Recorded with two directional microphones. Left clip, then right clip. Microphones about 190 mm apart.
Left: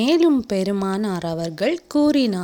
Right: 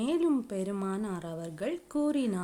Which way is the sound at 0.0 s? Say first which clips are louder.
Left 12 dB; 35° left (ahead or behind).